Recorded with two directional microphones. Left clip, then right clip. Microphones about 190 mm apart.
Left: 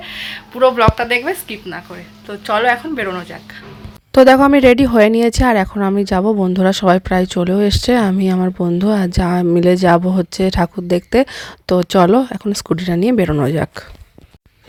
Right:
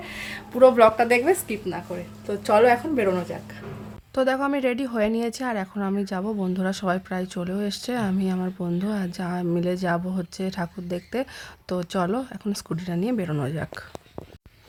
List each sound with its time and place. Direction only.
0.0 s speech: 10° right (ahead or behind)
2.4 s speech: 10° right (ahead or behind)
4.1 s speech: 45° left (ahead or behind)